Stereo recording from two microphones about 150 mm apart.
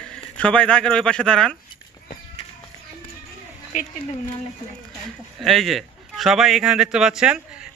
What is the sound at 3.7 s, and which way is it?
Speech, 55° left (ahead or behind).